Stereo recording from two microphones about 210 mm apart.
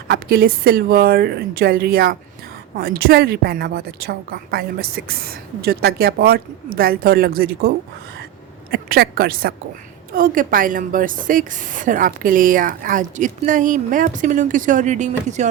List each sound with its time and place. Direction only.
0.1 s a woman's voice: 45° right (ahead or behind)
8.7 s a woman's voice: 45° right (ahead or behind)